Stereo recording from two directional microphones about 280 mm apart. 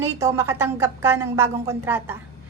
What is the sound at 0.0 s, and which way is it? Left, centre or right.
A woman's voice, centre.